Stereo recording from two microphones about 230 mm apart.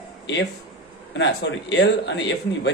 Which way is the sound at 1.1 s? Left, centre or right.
Left.